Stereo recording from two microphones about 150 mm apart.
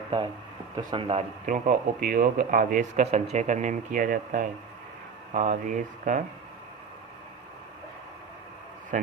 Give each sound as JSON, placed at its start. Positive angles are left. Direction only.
{"t": 0.8, "sound": "speech", "side_deg": -30}
{"t": 1.5, "sound": "speech", "side_deg": -60}
{"t": 3.0, "sound": "speech", "side_deg": -45}